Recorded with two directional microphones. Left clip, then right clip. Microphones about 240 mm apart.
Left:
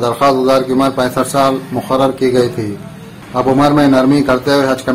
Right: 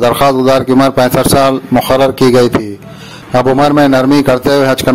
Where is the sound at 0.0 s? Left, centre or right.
Right.